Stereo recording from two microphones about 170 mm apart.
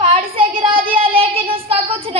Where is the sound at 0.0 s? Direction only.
30° right (ahead or behind).